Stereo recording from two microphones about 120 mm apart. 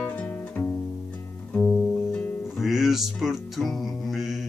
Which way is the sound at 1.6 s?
5° left (ahead or behind).